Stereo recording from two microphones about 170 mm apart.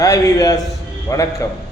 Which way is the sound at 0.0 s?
20° left (ahead or behind).